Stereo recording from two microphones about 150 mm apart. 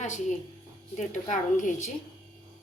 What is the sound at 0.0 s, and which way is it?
A woman's voice, 55° left (ahead or behind).